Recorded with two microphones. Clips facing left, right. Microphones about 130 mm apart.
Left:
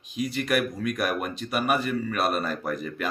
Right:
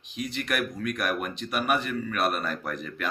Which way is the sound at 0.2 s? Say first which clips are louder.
Left 4 dB; 5° left (ahead or behind).